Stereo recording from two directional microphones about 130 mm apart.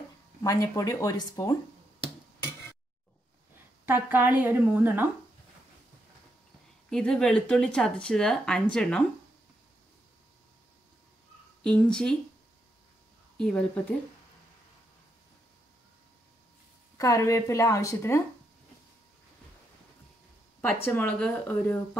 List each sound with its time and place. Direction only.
0.4 s a woman's voice: 25° left (ahead or behind)
3.8 s speech: 15° right (ahead or behind)
6.9 s speech: 5° left (ahead or behind)
11.6 s speech: 5° left (ahead or behind)
13.4 s speech: 5° left (ahead or behind)
16.9 s a woman's voice: 25° left (ahead or behind)
20.6 s speech: 15° left (ahead or behind)